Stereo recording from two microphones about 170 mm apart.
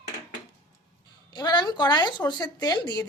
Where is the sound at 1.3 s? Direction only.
25° left (ahead or behind).